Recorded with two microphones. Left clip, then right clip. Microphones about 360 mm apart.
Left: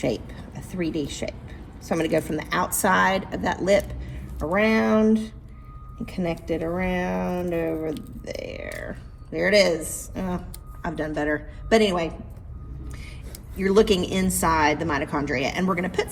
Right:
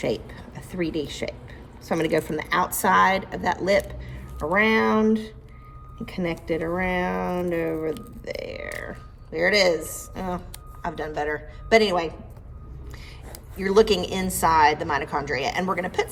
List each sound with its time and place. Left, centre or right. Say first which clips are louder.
0.0 s a woman's voice: even; right
13.6 s a woman's voice: even; centre